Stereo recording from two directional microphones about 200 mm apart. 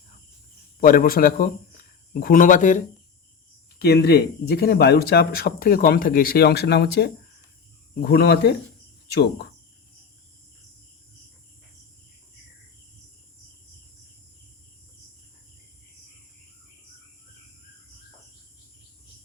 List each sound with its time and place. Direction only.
0.8 s speech: 45° left (ahead or behind)
3.8 s speech: 55° left (ahead or behind)
9.0 s cricket: 55° left (ahead or behind)